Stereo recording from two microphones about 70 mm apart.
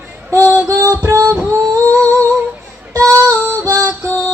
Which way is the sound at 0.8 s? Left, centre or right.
Right.